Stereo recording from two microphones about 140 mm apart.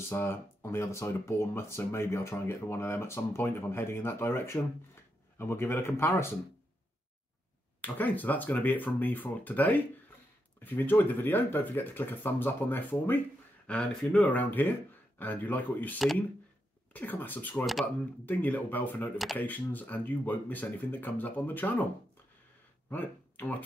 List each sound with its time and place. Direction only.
0.1 s speech: 15° left (ahead or behind)
7.8 s speech: 10° left (ahead or behind)
22.8 s speech: 15° left (ahead or behind)